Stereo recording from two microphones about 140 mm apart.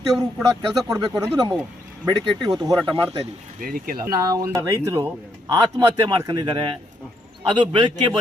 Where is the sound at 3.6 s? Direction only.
90° right.